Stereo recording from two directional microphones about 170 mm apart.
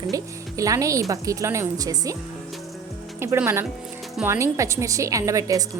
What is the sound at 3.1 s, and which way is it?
Speech, 15° right (ahead or behind).